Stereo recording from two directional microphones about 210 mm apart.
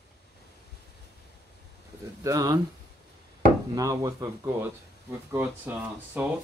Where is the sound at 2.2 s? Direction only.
15° right (ahead or behind).